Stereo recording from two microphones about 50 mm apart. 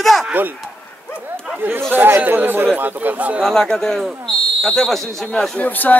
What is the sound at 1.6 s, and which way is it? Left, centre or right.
Speech, right.